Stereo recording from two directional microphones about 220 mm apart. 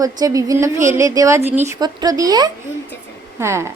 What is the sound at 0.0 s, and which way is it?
A woman's voice, 15° right (ahead or behind).